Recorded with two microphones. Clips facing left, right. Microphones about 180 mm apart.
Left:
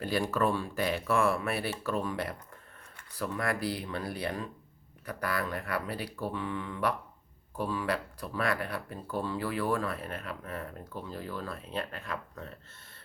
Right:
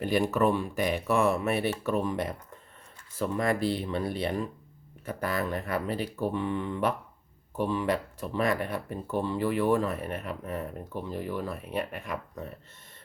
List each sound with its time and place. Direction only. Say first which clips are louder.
0.0 s speech: right 4 dB; 20° right (ahead or behind)